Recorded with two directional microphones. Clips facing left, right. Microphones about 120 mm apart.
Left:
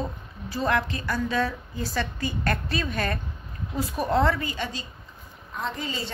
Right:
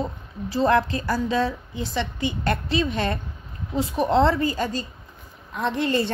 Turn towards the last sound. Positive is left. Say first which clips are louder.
# right 8 dB
turn(degrees=-65)  # may be behind; listen again after turning